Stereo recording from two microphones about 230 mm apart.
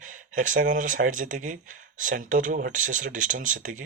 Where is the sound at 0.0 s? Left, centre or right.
Right.